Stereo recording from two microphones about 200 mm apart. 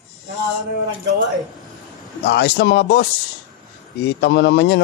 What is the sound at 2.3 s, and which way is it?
Speech, 55° left (ahead or behind).